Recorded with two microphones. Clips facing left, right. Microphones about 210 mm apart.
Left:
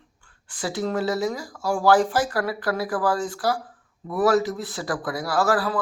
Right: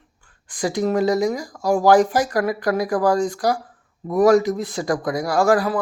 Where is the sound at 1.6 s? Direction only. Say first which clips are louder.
Right 5 dB; 30° right (ahead or behind).